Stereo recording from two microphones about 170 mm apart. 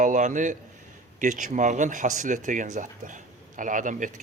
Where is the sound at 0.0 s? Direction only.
45° right (ahead or behind).